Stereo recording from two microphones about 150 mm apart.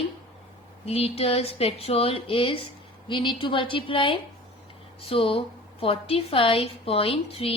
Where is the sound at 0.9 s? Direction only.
45° left (ahead or behind).